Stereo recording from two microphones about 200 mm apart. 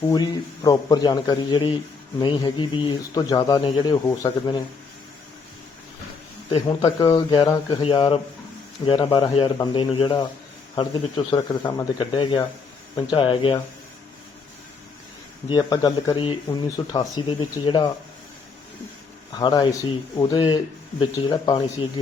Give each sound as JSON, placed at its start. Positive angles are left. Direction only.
{"t": 0.1, "sound": "speech", "side_deg": 20}
{"t": 6.5, "sound": "speech", "side_deg": 25}
{"t": 15.4, "sound": "speech", "side_deg": 20}
{"t": 19.3, "sound": "speech", "side_deg": 20}